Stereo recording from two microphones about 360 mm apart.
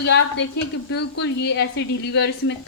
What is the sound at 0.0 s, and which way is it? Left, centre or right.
A woman's voice, left.